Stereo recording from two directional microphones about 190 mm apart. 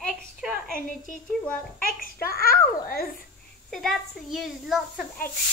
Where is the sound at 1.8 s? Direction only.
50° left (ahead or behind).